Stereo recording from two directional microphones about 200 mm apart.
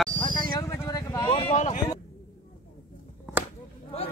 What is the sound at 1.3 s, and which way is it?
Speech, 35° left (ahead or behind).